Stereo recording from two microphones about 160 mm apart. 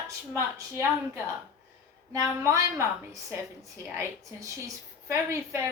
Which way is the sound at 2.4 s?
20° right (ahead or behind).